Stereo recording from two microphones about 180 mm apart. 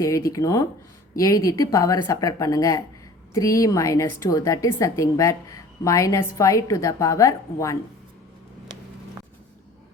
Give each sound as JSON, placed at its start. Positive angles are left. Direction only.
{"t": 0.3, "sound": "a woman's voice", "side_deg": 20}